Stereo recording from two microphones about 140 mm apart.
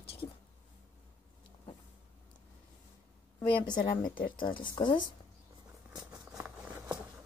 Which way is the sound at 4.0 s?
80° left.